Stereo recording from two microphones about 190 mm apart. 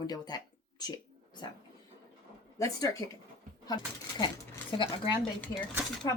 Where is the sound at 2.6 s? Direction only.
20° left (ahead or behind).